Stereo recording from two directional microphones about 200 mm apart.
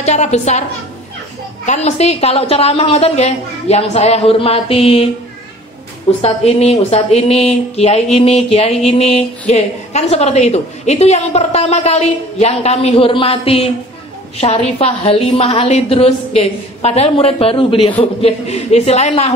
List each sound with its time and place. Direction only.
0.0 s a woman's voice: 35° left (ahead or behind)
1.7 s a woman's voice: 35° left (ahead or behind)
6.2 s a woman's voice: 30° left (ahead or behind)